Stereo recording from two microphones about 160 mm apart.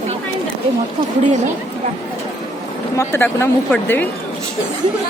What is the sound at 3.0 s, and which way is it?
Speech, 15° left (ahead or behind).